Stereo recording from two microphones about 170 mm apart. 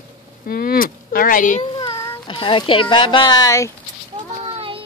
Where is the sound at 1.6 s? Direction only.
20° left (ahead or behind).